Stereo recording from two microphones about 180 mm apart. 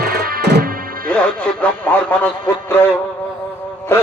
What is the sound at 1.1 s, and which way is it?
Music, 5° left (ahead or behind).